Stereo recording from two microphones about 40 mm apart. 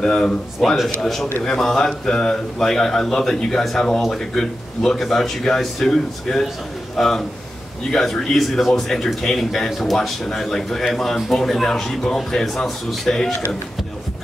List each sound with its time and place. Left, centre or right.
0.0 s speech: centre
1.0 s a man's voice: centre
8.8 s speech: centre
9.7 s a man's voice: centre